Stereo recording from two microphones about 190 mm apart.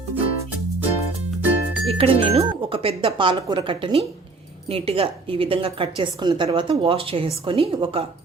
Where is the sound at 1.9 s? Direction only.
30° right (ahead or behind).